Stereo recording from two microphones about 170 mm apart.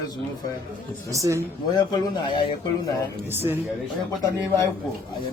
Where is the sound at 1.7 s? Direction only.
25° left (ahead or behind).